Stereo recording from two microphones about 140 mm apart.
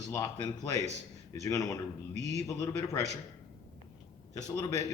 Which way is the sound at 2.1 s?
55° right (ahead or behind).